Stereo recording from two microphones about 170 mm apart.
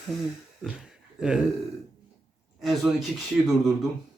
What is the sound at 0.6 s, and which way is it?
Speech, 5° right (ahead or behind).